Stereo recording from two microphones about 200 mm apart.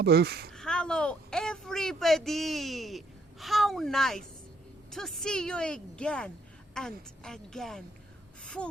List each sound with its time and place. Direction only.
0.0 s speech: 55° right (ahead or behind)
0.5 s a woman's voice: 5° left (ahead or behind)
8.4 s gasp: 5° left (ahead or behind)